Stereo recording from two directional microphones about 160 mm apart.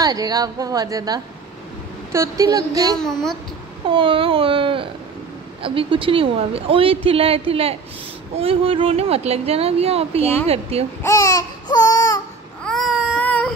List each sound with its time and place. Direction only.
0.0 s a woman's voice: 25° right (ahead or behind)
3.0 s a woman's voice: 5° left (ahead or behind)
3.9 s speech: 35° right (ahead or behind)
11.0 s a sound: 20° left (ahead or behind)
12.6 s baby cry: centre (ahead or behind)
13.2 s a sound: 10° left (ahead or behind)